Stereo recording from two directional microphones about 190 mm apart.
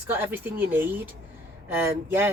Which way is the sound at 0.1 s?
10° right (ahead or behind).